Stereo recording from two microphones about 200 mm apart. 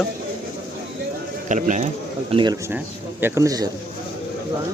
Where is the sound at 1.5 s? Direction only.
40° right (ahead or behind).